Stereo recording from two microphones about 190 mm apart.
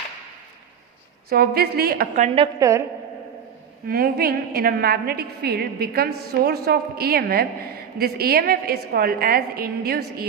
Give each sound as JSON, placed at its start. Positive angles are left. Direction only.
{"t": 1.3, "sound": "a woman's voice", "side_deg": -55}
{"t": 2.2, "sound": "a woman's voice", "side_deg": -30}
{"t": 2.6, "sound": "a woman's voice", "side_deg": -15}
{"t": 3.8, "sound": "a woman's voice", "side_deg": -55}